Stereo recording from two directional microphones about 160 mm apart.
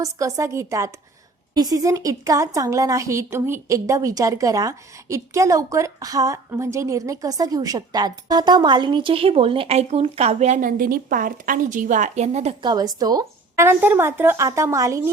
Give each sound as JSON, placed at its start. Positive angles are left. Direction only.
{"t": 0.0, "sound": "a woman's voice", "side_deg": -20}
{"t": 12.6, "sound": "a woman's voice", "side_deg": -25}